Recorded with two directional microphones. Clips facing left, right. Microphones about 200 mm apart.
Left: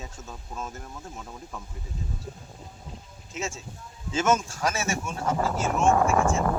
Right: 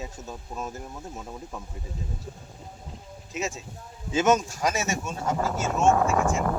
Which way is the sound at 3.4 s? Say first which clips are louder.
Right 2 dB; 15° right (ahead or behind).